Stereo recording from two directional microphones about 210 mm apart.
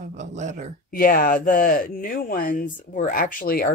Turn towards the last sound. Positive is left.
turn(degrees=45)  # may be behind; listen again after turning